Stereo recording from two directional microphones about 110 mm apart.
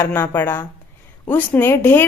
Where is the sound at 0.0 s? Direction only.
20° left (ahead or behind).